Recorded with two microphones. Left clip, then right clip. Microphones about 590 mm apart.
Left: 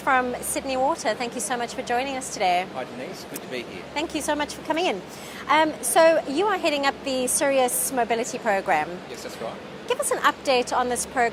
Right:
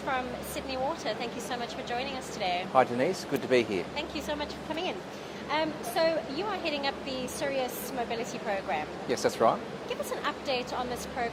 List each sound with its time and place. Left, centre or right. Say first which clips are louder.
0.1 s a woman's voice: left 11 dB; left
3.9 s a woman's voice: left 8 dB; left
9.4 s speech: right 9 dB; right
9.9 s a woman's voice: left 11 dB; left